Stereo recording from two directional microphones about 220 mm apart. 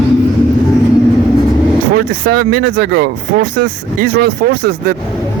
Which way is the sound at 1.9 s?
45° right (ahead or behind).